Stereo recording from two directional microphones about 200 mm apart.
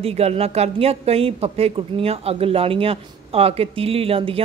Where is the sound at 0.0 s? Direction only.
30° right (ahead or behind).